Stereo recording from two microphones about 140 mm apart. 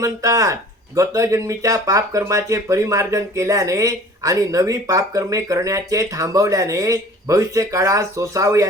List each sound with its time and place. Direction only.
0.0 s speech: 25° right (ahead or behind)